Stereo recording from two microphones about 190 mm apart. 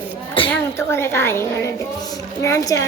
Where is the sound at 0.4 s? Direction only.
30° left (ahead or behind).